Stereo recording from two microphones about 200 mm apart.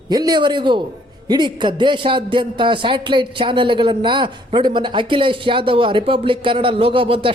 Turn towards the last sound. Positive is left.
turn(degrees=-25)  # may be behind; listen again after turning